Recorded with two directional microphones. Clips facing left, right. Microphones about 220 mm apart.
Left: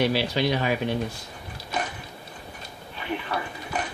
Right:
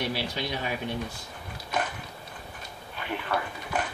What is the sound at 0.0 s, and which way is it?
Speech, 75° left (ahead or behind).